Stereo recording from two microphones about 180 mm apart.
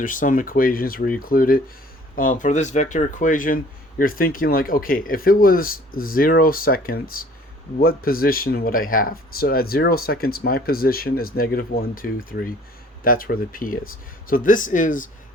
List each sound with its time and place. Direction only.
0.0 s speech: 50° left (ahead or behind)